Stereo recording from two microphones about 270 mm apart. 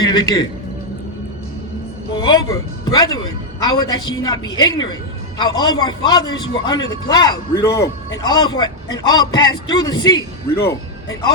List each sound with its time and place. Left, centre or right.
0.0 s a man's voice: centre
2.2 s a man's voice: centre